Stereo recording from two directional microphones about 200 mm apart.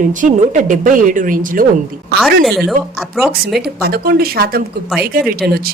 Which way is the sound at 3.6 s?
50° right (ahead or behind).